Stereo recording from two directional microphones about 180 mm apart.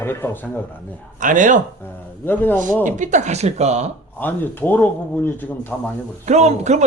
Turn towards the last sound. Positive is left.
turn(degrees=-40)  # may be behind; listen again after turning